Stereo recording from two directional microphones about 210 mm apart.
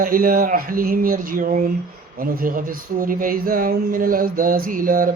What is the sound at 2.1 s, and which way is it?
Speech, 45° right (ahead or behind).